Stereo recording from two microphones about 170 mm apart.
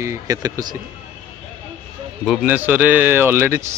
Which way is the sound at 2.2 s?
5° right (ahead or behind).